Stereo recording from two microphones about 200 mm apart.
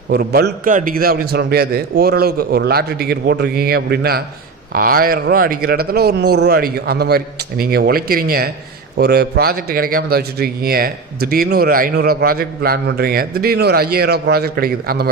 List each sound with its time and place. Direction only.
0.1 s speech: 50° right (ahead or behind)